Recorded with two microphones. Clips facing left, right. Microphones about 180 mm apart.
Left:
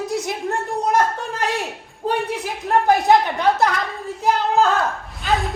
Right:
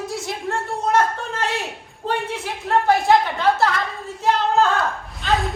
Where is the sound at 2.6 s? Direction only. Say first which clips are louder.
Left 1 dB; 20° left (ahead or behind).